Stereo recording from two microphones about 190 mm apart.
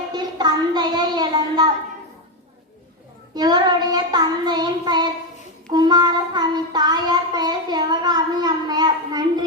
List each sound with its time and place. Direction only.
0.1 s child singing: 20° right (ahead or behind)
3.3 s child singing: 20° right (ahead or behind)